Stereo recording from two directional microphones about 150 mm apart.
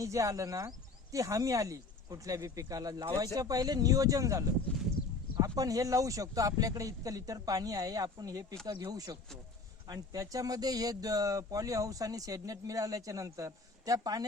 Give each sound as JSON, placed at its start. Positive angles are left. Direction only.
{"t": 0.0, "sound": "speech", "side_deg": -20}